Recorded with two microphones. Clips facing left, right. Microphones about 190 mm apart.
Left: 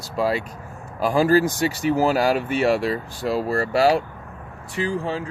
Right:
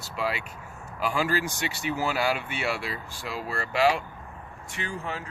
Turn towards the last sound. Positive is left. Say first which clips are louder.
# left 9 dB
turn(degrees=30)  # may be behind; listen again after turning